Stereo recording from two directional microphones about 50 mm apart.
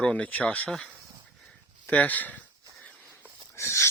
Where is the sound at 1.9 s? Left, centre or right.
Left.